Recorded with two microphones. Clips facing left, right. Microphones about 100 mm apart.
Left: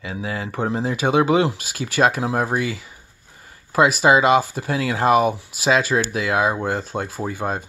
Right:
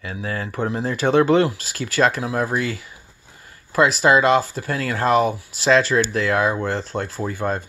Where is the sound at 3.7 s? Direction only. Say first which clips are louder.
Left 1 dB; 15° left (ahead or behind).